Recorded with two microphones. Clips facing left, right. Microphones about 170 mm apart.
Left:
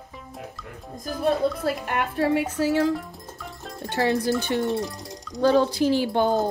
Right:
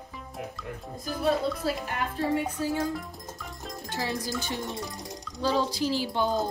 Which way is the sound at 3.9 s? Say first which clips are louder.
Left 10 dB; 65° left (ahead or behind).